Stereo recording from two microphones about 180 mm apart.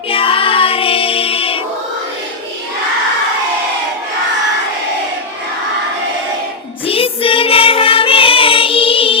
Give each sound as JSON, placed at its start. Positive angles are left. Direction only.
{"t": 0.1, "sound": "child singing", "side_deg": 30}
{"t": 6.8, "sound": "music", "side_deg": 30}